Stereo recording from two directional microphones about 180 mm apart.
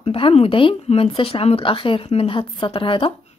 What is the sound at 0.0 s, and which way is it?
Speech, 35° left (ahead or behind).